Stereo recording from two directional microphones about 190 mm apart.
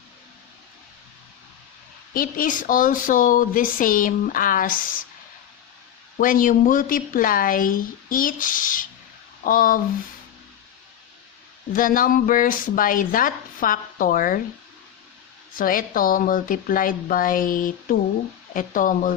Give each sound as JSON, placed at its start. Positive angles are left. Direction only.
{"t": 2.1, "sound": "speech", "side_deg": 45}
{"t": 6.1, "sound": "speech", "side_deg": 45}
{"t": 11.7, "sound": "speech", "side_deg": 45}
{"t": 15.5, "sound": "speech", "side_deg": 45}